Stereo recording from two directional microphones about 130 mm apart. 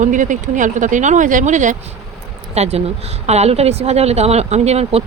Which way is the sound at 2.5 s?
55° right (ahead or behind).